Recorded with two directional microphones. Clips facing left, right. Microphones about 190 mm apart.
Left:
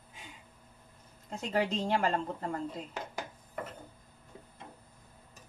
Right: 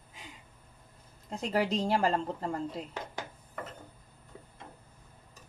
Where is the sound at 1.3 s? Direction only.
35° right (ahead or behind).